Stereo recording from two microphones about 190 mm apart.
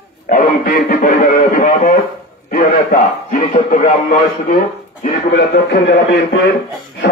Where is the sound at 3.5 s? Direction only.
45° left (ahead or behind).